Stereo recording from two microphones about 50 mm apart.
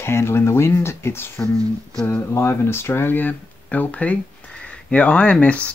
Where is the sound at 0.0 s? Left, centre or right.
Left.